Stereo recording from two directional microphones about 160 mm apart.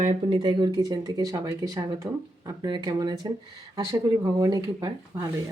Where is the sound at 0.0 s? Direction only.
40° right (ahead or behind).